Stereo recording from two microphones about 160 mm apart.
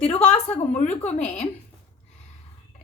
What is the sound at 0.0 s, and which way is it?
A woman's voice, 40° left (ahead or behind).